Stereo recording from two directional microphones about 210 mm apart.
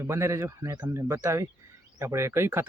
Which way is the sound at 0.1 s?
15° right (ahead or behind).